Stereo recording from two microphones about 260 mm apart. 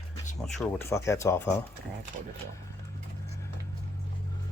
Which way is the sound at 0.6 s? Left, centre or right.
Centre.